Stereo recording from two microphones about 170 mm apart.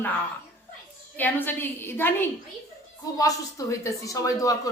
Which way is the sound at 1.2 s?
10° left (ahead or behind).